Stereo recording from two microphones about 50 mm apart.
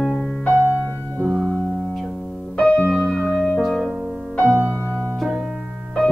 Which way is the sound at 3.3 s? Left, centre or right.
Centre.